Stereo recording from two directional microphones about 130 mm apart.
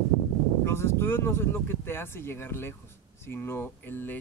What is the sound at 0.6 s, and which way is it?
Speech, 20° left (ahead or behind).